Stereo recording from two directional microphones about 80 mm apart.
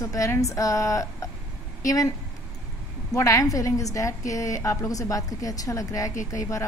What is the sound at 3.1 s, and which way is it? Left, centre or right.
A woman's voice, left.